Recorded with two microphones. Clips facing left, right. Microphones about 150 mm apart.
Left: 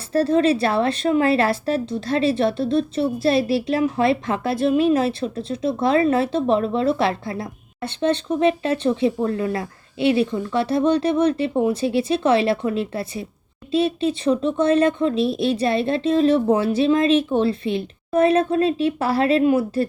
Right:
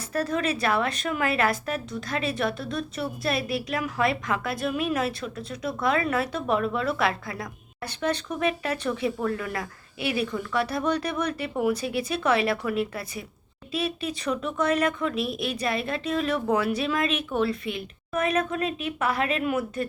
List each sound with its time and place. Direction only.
0.1 s speech: 30° left (ahead or behind)